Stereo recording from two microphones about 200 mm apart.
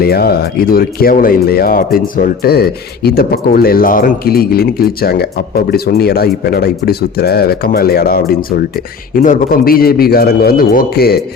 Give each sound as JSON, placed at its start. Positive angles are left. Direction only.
{"t": 0.0, "sound": "speech", "side_deg": 50}